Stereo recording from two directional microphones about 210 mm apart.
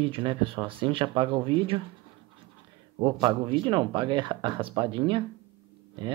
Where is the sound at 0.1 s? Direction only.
25° right (ahead or behind).